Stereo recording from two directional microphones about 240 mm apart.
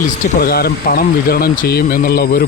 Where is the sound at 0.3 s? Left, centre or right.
Left.